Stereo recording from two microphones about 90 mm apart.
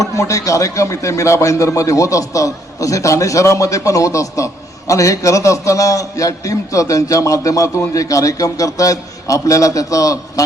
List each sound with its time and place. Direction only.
0.0 s speech: 35° left (ahead or behind)